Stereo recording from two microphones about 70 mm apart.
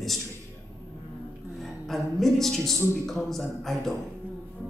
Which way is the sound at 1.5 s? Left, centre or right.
Centre.